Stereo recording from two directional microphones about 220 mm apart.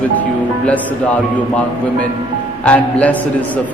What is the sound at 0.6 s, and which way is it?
Music, 5° left (ahead or behind).